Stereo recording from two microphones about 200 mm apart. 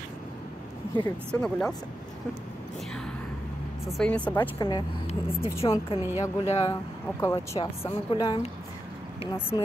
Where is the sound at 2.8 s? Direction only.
5° left (ahead or behind).